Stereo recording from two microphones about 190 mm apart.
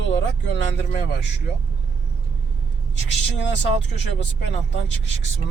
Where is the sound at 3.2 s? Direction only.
65° left (ahead or behind).